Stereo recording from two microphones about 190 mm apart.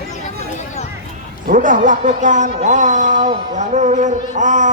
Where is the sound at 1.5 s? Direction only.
45° right (ahead or behind).